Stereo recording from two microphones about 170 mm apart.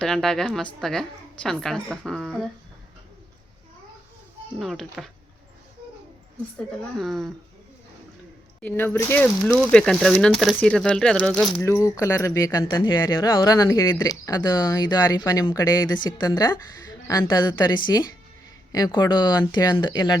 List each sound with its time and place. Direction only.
0.0 s speech: 5° left (ahead or behind)
4.6 s speech: centre (ahead or behind)
6.7 s speech: centre (ahead or behind)
8.6 s speech: 10° left (ahead or behind)
11.6 s speech: 15° left (ahead or behind)